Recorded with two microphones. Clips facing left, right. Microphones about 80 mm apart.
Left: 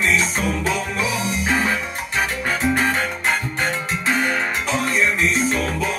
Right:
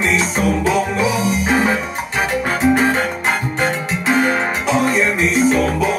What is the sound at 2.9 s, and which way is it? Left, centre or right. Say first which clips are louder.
Music: right 3 dB; right.